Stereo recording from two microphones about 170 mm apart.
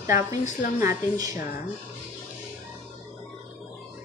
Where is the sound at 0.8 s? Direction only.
20° right (ahead or behind).